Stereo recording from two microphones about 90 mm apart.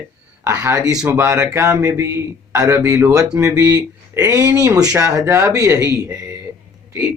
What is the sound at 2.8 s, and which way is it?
Speech, 35° right (ahead or behind).